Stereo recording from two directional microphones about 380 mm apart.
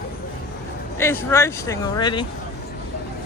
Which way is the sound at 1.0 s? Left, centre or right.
Centre.